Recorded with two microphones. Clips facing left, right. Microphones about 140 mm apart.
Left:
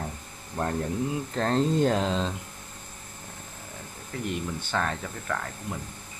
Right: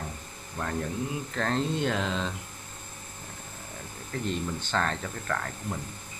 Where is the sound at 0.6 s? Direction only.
40° left (ahead or behind).